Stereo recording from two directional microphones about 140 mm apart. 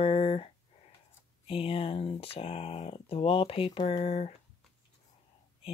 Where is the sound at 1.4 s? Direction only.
40° left (ahead or behind).